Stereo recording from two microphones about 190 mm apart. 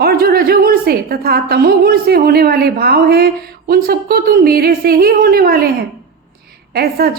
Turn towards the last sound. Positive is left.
turn(degrees=-55)  # may be behind; listen again after turning